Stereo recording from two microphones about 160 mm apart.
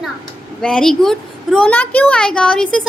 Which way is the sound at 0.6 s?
5° left (ahead or behind).